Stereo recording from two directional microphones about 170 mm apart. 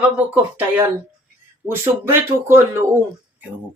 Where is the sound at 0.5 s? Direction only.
10° right (ahead or behind).